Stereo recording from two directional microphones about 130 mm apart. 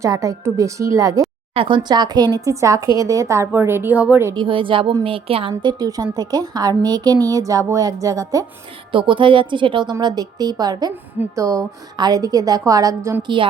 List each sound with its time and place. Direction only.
0.0 s speech: 25° right (ahead or behind)
1.5 s speech: 40° right (ahead or behind); by 4.4 s 15° right (ahead or behind)
4.4 s a woman's voice: 40° right (ahead or behind)
8.9 s a woman's voice: 40° right (ahead or behind); by 13.2 s 20° right (ahead or behind)
13.2 s a woman's voice: 40° right (ahead or behind)